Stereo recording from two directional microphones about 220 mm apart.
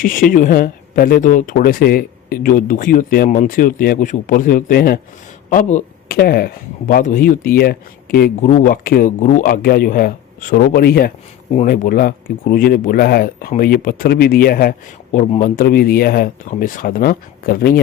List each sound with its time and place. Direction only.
0.0 s speech: 40° left (ahead or behind)